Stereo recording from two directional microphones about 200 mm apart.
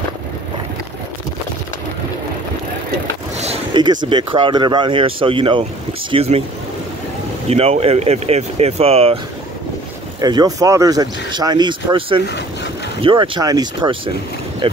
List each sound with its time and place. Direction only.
3.3 s a sound: 25° right (ahead or behind)
4.1 s speech: 25° right (ahead or behind)
7.4 s speech: 30° right (ahead or behind)
10.2 s speech: 20° right (ahead or behind)